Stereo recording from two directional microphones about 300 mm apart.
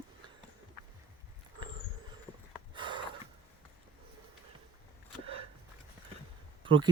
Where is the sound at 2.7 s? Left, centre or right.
Centre.